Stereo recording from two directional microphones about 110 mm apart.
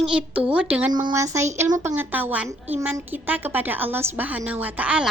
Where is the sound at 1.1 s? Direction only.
25° right (ahead or behind).